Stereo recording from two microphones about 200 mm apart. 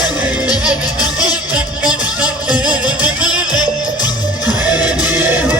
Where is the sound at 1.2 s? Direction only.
5° right (ahead or behind).